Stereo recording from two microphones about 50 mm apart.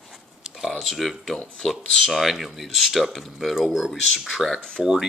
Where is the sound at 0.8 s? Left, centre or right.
Centre.